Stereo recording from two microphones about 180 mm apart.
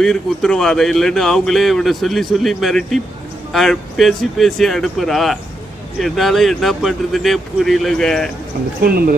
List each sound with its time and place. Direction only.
0.0 s speech: 5° left (ahead or behind)
8.8 s speech: 55° right (ahead or behind)